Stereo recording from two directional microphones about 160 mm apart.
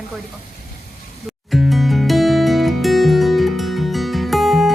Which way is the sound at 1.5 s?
Centre (ahead or behind).